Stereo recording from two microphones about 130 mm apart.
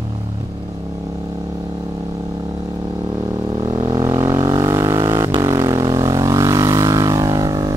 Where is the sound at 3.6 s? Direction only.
35° right (ahead or behind).